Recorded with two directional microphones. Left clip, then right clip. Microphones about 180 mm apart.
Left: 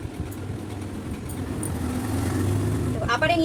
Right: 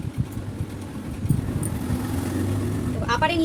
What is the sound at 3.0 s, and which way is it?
Speech, 20° right (ahead or behind).